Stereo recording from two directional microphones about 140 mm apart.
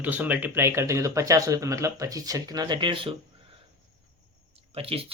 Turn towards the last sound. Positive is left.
turn(degrees=-45)  # may be behind; listen again after turning